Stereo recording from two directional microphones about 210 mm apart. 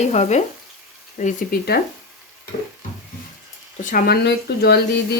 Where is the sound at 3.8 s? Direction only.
45° left (ahead or behind).